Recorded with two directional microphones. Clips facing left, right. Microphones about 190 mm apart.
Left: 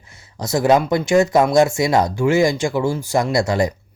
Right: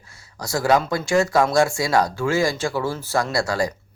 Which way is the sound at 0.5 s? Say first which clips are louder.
Left 4 dB; 20° left (ahead or behind).